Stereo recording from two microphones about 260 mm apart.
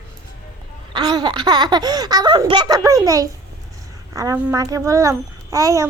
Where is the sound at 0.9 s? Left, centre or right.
Centre.